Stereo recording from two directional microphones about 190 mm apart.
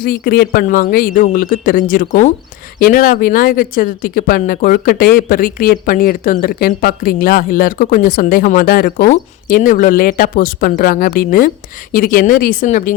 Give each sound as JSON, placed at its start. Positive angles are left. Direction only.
{"t": 0.0, "sound": "speech", "side_deg": 55}